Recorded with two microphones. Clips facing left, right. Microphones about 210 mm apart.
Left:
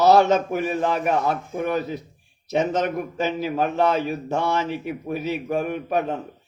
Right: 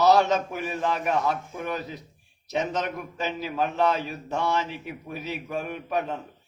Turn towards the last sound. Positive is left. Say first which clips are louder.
# left 5 dB
turn(degrees=50)  # may be behind; listen again after turning